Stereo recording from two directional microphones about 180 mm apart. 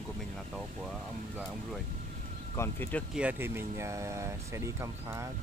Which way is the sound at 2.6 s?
10° left (ahead or behind).